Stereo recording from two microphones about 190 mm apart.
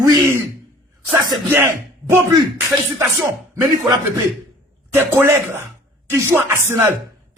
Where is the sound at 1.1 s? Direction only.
15° right (ahead or behind).